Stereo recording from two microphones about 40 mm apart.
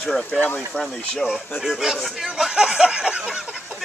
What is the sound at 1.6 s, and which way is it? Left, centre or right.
Speech, centre.